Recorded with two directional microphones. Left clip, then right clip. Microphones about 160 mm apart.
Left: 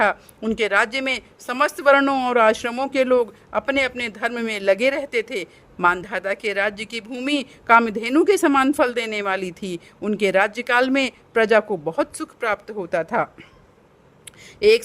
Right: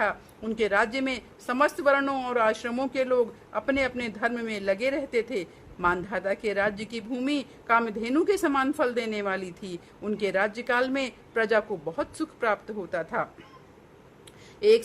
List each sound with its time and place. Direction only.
0.0 s a woman's voice: 50° left (ahead or behind)
14.6 s a woman's voice: 45° left (ahead or behind)